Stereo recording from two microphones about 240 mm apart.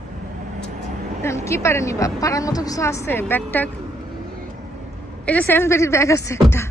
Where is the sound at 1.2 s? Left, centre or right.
Centre.